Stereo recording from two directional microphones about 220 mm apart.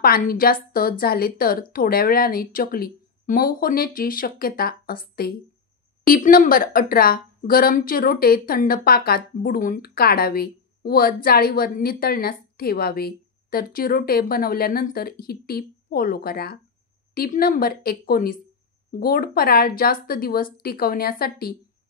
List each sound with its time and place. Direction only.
0.0 s a woman's voice: 40° left (ahead or behind)